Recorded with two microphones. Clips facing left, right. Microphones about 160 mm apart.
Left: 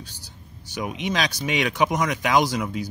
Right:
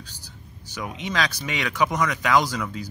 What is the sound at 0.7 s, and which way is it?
Speech, 20° left (ahead or behind).